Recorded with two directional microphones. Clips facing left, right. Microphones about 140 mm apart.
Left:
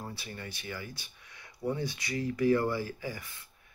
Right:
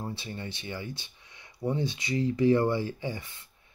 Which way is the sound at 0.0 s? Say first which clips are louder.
Right 5 dB; 25° right (ahead or behind).